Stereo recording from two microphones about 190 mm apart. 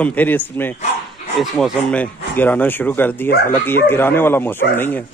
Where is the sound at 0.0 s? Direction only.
10° left (ahead or behind).